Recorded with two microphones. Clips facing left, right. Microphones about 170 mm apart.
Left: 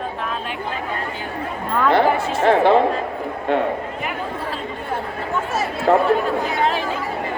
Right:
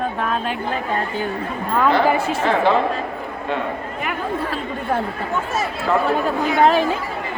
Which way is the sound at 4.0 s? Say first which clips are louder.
Right 3 dB; 60° right (ahead or behind).